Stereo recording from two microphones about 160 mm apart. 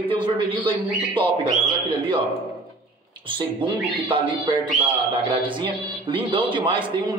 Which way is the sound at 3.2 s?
30° right (ahead or behind).